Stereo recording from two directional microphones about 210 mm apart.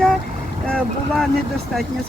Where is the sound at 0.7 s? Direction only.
Centre (ahead or behind).